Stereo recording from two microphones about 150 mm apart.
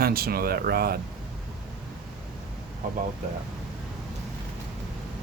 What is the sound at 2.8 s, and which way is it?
Speech, 60° right (ahead or behind).